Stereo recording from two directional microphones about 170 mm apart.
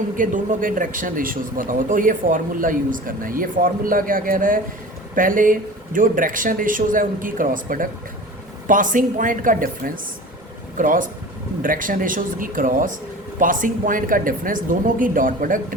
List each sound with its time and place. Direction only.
0.2 s a man's voice: 50° right (ahead or behind)